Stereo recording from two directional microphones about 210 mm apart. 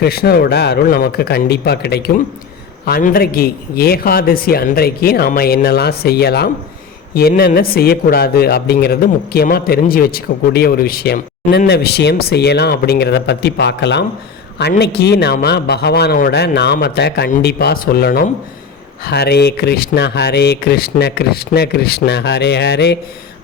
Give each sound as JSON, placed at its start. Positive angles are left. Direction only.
{"t": 0.0, "sound": "speech", "side_deg": 50}